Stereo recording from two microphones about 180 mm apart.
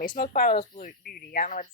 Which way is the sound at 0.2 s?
55° left (ahead or behind).